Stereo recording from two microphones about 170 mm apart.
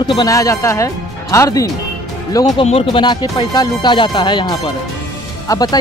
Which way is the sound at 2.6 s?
35° left (ahead or behind).